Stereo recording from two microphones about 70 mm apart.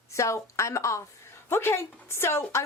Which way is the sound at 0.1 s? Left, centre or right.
Left.